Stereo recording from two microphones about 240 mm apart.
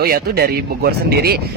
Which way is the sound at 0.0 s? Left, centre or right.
Right.